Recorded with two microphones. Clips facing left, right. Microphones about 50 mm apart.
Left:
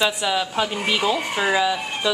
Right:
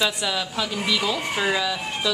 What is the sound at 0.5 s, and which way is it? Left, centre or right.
Speech, left.